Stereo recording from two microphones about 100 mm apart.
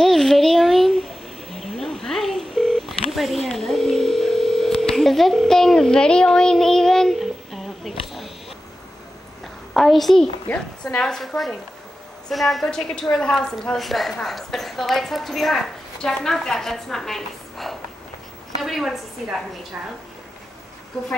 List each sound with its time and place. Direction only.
0.0 s a sound: 5° left (ahead or behind)
1.5 s telephone dialing: centre (ahead or behind)
9.8 s a child's voice: centre (ahead or behind)
10.5 s a woman's voice: 20° left (ahead or behind)
11.0 s a woman's voice: 5° left (ahead or behind)